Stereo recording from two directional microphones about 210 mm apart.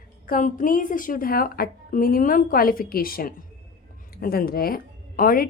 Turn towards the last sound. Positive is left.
turn(degrees=40)  # may be behind; listen again after turning